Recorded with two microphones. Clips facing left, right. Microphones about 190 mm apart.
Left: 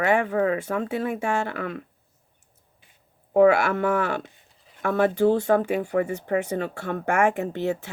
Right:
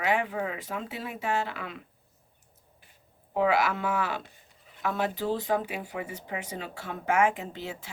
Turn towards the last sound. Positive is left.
turn(degrees=65)  # may be behind; listen again after turning